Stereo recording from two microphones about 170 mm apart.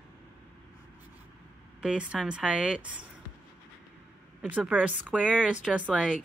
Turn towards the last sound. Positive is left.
turn(degrees=-5)  # may be behind; listen again after turning